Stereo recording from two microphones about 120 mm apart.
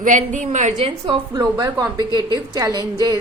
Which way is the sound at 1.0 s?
35° right (ahead or behind).